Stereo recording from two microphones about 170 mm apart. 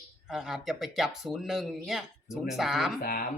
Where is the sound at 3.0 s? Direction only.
55° left (ahead or behind).